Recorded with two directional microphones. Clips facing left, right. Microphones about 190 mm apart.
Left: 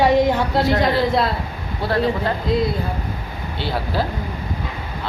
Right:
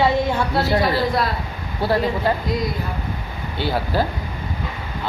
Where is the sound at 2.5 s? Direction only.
30° left (ahead or behind).